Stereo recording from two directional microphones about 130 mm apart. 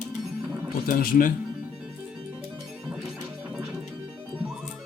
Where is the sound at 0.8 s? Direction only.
90° left.